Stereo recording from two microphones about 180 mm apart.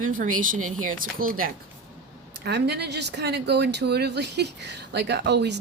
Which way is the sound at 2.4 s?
65° right (ahead or behind).